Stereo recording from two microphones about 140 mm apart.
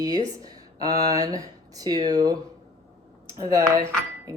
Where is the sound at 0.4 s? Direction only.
25° right (ahead or behind).